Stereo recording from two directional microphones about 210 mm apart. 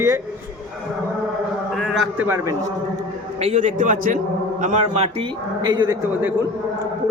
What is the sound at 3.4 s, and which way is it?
A man's voice, 35° right (ahead or behind).